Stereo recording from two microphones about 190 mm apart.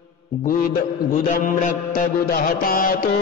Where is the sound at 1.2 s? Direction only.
45° left (ahead or behind).